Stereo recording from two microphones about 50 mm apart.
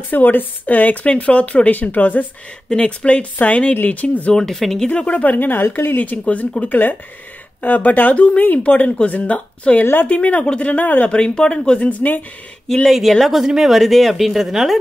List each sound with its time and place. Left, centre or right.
0.1 s speech: left
2.7 s speech: left
4.3 s speech: centre
4.8 s speech: left
5.2 s speech: left
6.7 s speech: left
11.1 s speech: centre
11.9 s speech: left
12.7 s speech: centre
13.3 s speech: centre